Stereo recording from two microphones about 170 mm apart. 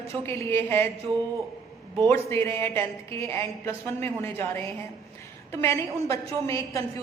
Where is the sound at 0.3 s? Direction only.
15° left (ahead or behind).